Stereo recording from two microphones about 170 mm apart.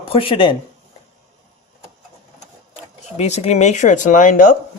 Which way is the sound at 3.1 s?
40° left (ahead or behind).